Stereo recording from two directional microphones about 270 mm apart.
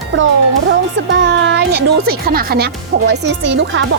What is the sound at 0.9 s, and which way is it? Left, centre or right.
Speech, right.